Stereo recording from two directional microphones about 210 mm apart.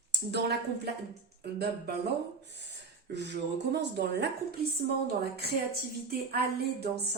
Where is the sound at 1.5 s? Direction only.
50° right (ahead or behind).